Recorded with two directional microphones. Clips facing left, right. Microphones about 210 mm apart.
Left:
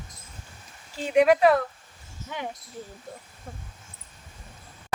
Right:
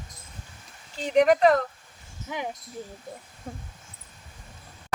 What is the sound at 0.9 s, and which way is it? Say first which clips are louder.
Speech: even; 5° left (ahead or behind).